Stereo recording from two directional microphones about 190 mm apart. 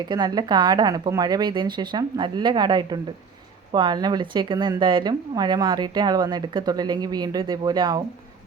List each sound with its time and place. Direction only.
0.1 s speech: 20° right (ahead or behind)